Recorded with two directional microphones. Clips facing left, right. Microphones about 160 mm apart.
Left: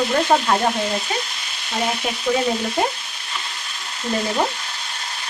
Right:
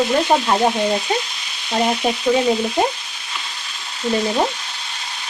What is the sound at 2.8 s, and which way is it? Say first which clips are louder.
Frying: right 1 dB; 20° right (ahead or behind).